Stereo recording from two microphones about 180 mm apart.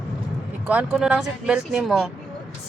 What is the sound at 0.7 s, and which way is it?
Speech, 5° right (ahead or behind).